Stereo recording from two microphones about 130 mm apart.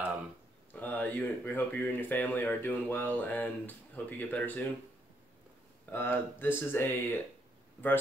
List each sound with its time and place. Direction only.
0.7 s speech: 15° left (ahead or behind)
5.9 s speech: 15° left (ahead or behind)